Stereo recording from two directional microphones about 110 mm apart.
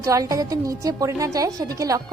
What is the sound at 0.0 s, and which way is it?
A woman's voice, 30° right (ahead or behind).